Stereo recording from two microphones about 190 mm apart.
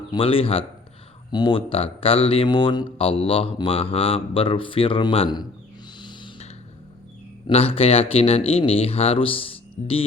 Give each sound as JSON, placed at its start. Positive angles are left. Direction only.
{"t": 0.1, "sound": "speech", "side_deg": 30}
{"t": 6.0, "sound": "a sound", "side_deg": 25}
{"t": 7.4, "sound": "speech", "side_deg": 30}